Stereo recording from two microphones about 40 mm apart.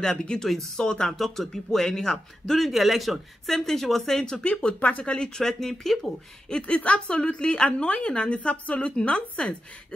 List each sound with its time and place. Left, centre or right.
0.0 s a woman's voice: centre
1.1 s speech: centre
2.7 s speech: centre; by 4.7 s left
4.8 s speech: left
5.4 s speech: centre
6.8 s a woman's voice: left